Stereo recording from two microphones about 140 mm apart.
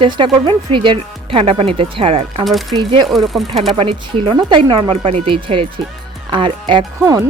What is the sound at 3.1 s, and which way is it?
Speech, centre (ahead or behind).